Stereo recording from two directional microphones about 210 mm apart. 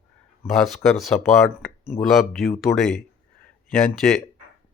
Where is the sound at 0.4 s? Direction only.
Centre (ahead or behind).